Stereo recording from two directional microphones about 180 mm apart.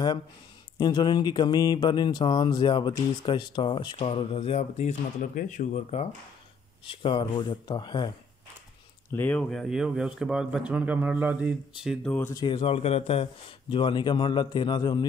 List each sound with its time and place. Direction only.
0.7 s speech: 25° left (ahead or behind); by 6.0 s 40° left (ahead or behind)
6.9 s speech: 30° left (ahead or behind)
9.1 s speech: 10° left (ahead or behind)
12.4 s speech: 30° left (ahead or behind)